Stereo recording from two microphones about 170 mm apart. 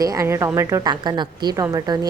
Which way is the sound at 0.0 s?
20° right (ahead or behind).